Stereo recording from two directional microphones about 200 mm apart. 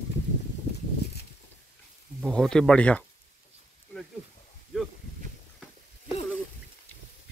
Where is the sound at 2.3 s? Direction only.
5° left (ahead or behind).